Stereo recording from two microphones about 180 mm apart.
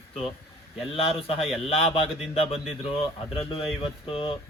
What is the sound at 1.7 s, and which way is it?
Speech, 30° left (ahead or behind).